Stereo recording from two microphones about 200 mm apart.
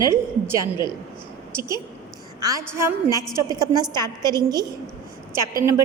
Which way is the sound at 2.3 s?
15° right (ahead or behind).